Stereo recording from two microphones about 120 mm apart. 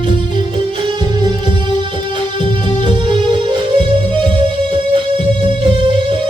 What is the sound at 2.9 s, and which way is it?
Music, 40° right (ahead or behind).